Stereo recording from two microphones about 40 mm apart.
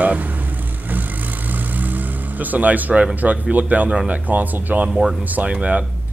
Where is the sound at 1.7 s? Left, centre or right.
Right.